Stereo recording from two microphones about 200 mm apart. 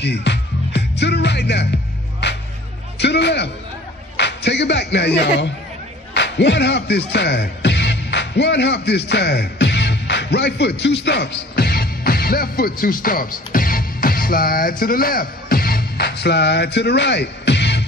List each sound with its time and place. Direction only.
0.0 s music: 60° left (ahead or behind)
3.0 s a man's voice: 60° left (ahead or behind)